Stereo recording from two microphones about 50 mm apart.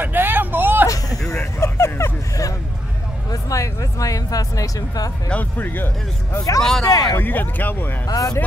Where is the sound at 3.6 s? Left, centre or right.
Left.